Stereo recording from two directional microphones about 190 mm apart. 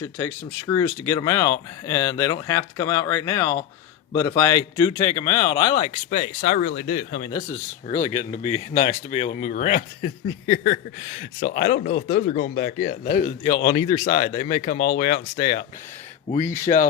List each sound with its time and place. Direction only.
0.2 s speech: 20° left (ahead or behind); by 7.3 s 40° left (ahead or behind)
7.3 s speech: 15° left (ahead or behind)
8.7 s speech: 40° left (ahead or behind)
16.7 s speech: 30° left (ahead or behind)